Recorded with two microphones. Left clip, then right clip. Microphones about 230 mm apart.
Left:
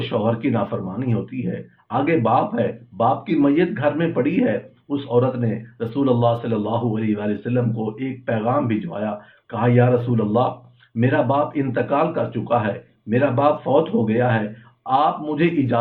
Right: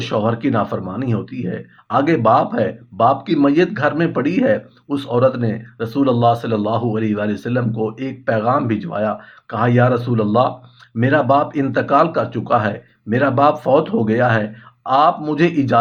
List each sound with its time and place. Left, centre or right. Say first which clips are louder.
0.0 s speech: right 3 dB; right